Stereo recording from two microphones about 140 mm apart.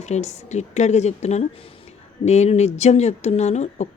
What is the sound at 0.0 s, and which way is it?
Speech, 55° left (ahead or behind).